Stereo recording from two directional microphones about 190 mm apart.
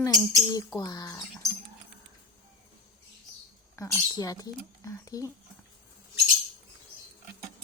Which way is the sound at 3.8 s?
15° left (ahead or behind).